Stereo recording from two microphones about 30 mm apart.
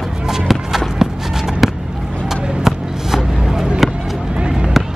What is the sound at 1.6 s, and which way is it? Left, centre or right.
Skateboard, centre.